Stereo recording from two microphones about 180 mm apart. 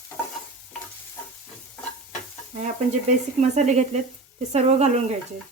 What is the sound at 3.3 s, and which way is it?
A woman's voice, 40° right (ahead or behind).